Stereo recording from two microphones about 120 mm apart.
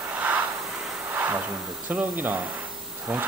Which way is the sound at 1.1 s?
15° right (ahead or behind).